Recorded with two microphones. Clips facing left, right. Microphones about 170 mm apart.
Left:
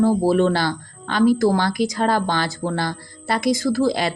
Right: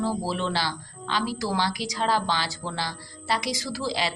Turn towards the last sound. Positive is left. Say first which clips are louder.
# left 10 dB
turn(degrees=50)  # may be behind; listen again after turning